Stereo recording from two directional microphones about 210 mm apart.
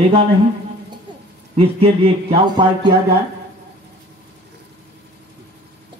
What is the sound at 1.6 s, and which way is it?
Speech, 25° right (ahead or behind).